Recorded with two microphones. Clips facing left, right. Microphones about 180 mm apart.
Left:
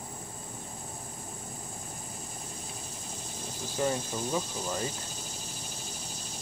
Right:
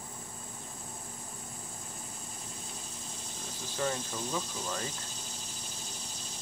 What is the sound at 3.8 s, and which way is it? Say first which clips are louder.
Speech: left 4 dB; 15° left (ahead or behind).